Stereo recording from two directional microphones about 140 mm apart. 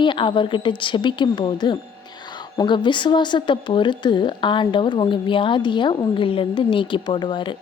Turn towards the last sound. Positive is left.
turn(degrees=35)  # may be behind; listen again after turning